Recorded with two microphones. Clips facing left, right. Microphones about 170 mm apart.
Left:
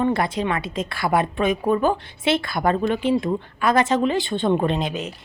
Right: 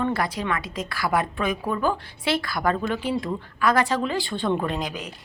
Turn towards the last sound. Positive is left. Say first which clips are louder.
# left 5 dB
turn(degrees=25)  # may be behind; listen again after turning